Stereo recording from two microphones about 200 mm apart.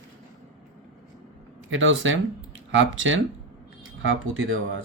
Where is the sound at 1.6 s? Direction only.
70° right (ahead or behind).